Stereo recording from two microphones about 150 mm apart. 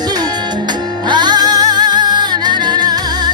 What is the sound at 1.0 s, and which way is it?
Music, 30° right (ahead or behind).